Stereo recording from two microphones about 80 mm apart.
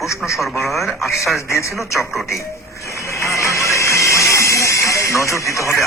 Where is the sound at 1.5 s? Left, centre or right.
Left.